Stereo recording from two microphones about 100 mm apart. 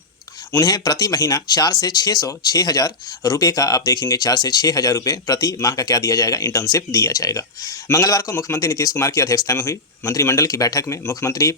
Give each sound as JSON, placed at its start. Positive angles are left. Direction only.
{"t": 0.5, "sound": "speech", "side_deg": 40}